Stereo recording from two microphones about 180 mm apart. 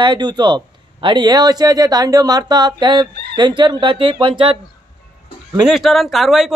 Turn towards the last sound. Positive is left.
turn(degrees=0)  # may be behind; listen again after turning